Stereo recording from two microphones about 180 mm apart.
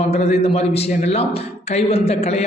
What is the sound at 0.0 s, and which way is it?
A man's voice, 35° left (ahead or behind).